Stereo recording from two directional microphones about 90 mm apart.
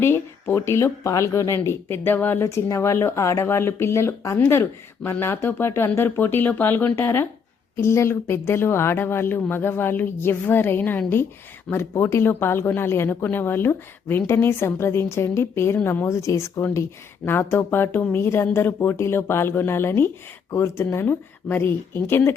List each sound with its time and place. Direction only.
0.0 s speech: 25° left (ahead or behind)